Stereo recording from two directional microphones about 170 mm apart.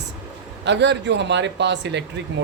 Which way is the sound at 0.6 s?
90° right.